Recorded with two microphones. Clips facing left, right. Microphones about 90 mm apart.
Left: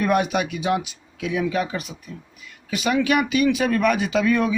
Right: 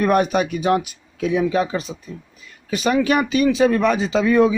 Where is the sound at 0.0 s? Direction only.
40° right (ahead or behind).